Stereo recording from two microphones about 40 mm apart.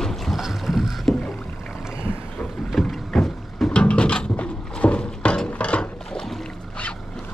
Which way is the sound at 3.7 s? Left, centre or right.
Left.